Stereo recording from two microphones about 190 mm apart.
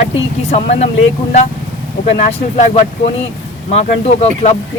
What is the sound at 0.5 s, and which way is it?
Speech, 35° left (ahead or behind).